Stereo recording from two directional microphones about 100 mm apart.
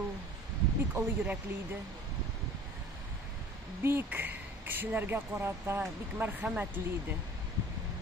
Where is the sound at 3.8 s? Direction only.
20° right (ahead or behind).